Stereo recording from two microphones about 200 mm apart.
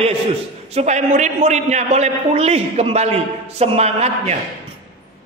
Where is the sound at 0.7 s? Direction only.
35° right (ahead or behind).